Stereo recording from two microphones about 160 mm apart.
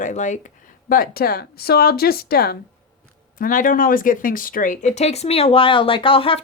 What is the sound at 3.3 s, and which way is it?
Speech, 60° left (ahead or behind).